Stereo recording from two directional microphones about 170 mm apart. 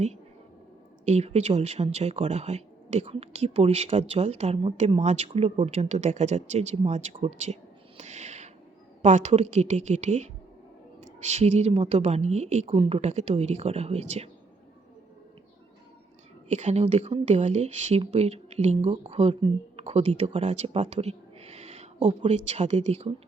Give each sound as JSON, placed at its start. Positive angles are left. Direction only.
{"t": 1.0, "sound": "a woman's voice", "side_deg": -40}
{"t": 16.5, "sound": "speech", "side_deg": -40}